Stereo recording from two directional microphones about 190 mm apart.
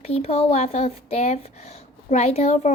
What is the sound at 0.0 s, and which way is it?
A woman's voice, 35° left (ahead or behind).